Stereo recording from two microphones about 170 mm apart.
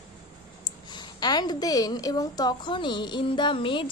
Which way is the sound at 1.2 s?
25° left (ahead or behind).